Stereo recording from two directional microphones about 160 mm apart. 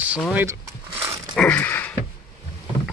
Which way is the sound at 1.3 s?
10° left (ahead or behind).